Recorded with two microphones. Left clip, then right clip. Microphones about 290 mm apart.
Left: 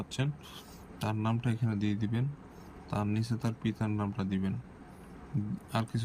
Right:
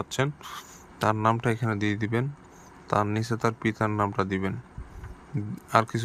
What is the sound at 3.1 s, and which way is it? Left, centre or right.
Speech, centre.